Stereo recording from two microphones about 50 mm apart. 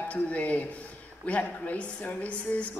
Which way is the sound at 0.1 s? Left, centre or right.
Left.